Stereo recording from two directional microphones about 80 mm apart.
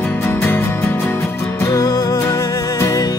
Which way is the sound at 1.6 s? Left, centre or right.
Left.